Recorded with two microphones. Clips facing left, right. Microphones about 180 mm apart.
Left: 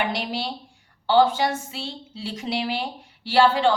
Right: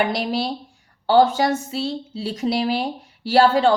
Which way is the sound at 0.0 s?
40° right (ahead or behind).